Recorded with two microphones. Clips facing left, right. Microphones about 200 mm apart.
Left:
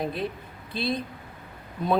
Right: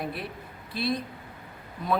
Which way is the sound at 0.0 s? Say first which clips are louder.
Left 5 dB; 20° left (ahead or behind).